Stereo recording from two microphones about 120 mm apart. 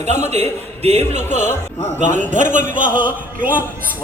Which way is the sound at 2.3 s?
90° right.